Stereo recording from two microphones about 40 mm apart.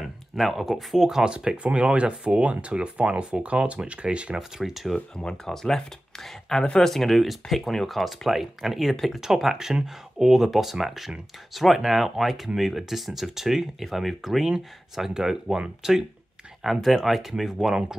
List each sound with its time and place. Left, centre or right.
0.0 s speech: centre; by 4.4 s right
4.4 s speech: centre
4.9 s speech: centre